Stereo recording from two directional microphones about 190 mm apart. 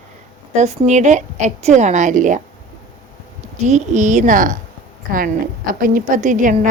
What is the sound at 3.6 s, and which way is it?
A woman's voice, 40° right (ahead or behind).